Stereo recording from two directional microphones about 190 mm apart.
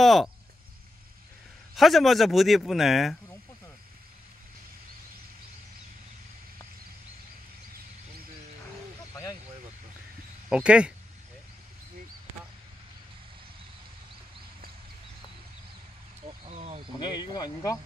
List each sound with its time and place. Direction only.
0.0 s speech: centre (ahead or behind)
1.8 s speech: centre (ahead or behind)
9.1 s a sound: 20° left (ahead or behind)
10.5 s speech: 5° right (ahead or behind)
16.4 s a sound: 30° right (ahead or behind)
17.0 s speech: 25° left (ahead or behind)